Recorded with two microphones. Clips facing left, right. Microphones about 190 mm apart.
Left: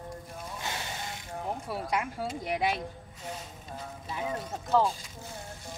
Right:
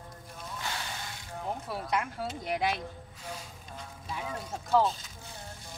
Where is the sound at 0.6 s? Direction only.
20° left (ahead or behind).